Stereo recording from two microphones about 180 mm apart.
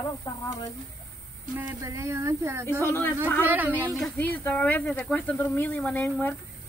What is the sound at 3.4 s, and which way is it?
Speech, 10° right (ahead or behind).